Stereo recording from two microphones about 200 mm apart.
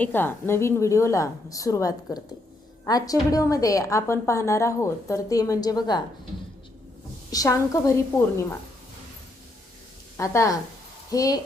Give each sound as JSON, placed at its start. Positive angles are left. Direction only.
{"t": 0.0, "sound": "a woman's voice", "side_deg": 10}
{"t": 7.3, "sound": "a woman's voice", "side_deg": 15}
{"t": 10.2, "sound": "a woman's voice", "side_deg": 15}